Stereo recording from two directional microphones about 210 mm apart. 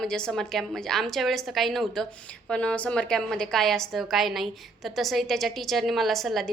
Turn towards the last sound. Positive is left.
turn(degrees=0)  # may be behind; listen again after turning